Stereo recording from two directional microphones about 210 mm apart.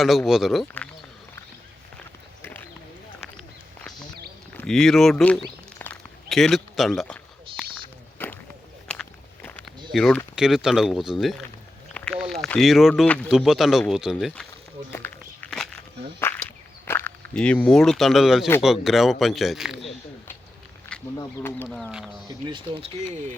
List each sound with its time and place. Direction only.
0.3 s speech: centre (ahead or behind)
2.4 s clip-clop: 10° left (ahead or behind)
4.5 s speech: centre (ahead or behind)
5.8 s a sound: 5° left (ahead or behind)
8.9 s walk: 5° left (ahead or behind)
9.9 s speech: centre (ahead or behind)
14.8 s walk: 10° left (ahead or behind)
16.8 s speech: 10° left (ahead or behind)
20.9 s speech: 10° left (ahead or behind)
22.4 s speech: 25° right (ahead or behind)